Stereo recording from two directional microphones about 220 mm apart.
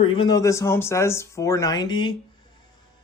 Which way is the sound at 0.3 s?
15° left (ahead or behind).